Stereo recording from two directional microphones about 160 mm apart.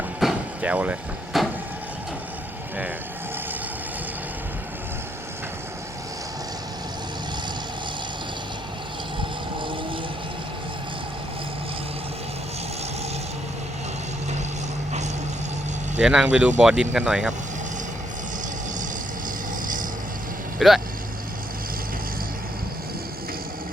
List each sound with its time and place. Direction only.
0.2 s vehicle: 5° right (ahead or behind)
9.6 s vehicle: 30° right (ahead or behind)
16.0 s speech: 5° right (ahead or behind)
20.6 s speech: centre (ahead or behind)